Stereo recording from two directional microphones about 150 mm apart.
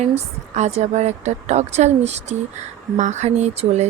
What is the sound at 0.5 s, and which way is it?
Speech, 50° right (ahead or behind).